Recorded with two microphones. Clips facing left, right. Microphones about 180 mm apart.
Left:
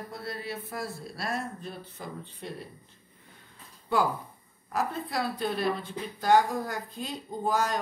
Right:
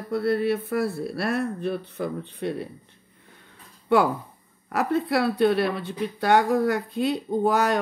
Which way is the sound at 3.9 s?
70° right (ahead or behind).